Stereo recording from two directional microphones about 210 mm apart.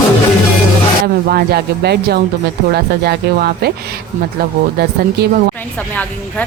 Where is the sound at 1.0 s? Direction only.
50° right (ahead or behind).